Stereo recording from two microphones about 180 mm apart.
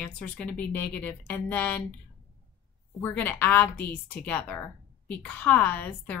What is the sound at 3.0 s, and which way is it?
Speech, 10° left (ahead or behind).